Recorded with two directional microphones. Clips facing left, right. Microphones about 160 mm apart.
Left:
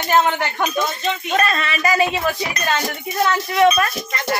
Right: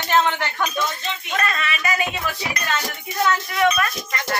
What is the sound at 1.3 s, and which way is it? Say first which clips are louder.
Speech: left 3 dB; 35° left (ahead or behind).